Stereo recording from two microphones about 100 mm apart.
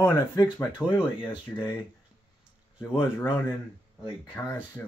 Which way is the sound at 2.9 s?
25° left (ahead or behind).